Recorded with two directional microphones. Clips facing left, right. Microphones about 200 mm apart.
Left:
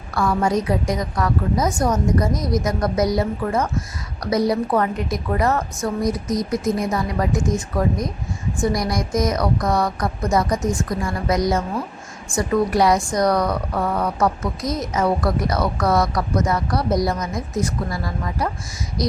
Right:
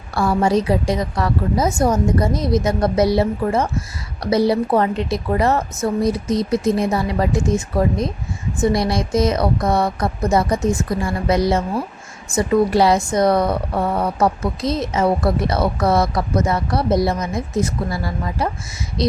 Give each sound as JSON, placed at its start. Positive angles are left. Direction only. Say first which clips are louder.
{"t": 0.1, "sound": "a woman's voice", "louder": "right 3 dB", "side_deg": -30}